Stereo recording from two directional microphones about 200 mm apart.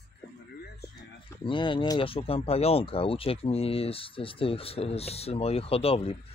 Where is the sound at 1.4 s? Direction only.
25° left (ahead or behind).